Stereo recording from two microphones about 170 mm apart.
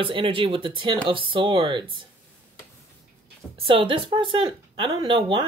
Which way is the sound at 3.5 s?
30° right (ahead or behind).